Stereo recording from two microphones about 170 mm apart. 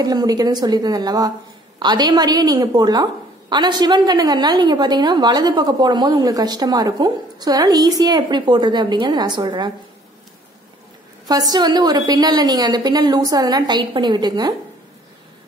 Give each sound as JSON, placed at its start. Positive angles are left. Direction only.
{"t": 0.0, "sound": "a woman's voice", "side_deg": -20}
{"t": 11.2, "sound": "a woman's voice", "side_deg": -20}